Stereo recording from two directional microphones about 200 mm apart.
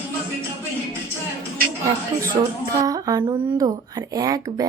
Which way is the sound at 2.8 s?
20° right (ahead or behind).